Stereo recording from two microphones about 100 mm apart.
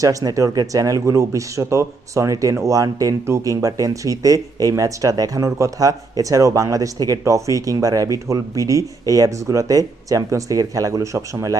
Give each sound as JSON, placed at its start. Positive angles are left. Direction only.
{"t": 0.0, "sound": "speech", "side_deg": -35}